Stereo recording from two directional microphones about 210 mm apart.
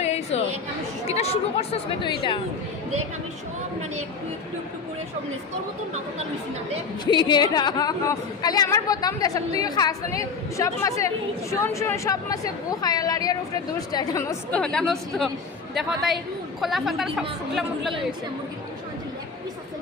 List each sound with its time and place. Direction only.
0.0 s chatter: 30° left (ahead or behind)
1.0 s a woman's voice: 30° left (ahead or behind)
7.0 s a woman's voice: 20° left (ahead or behind); by 17.9 s centre (ahead or behind)